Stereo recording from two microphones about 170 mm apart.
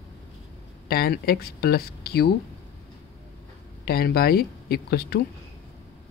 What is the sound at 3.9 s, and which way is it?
Speech, 65° left (ahead or behind).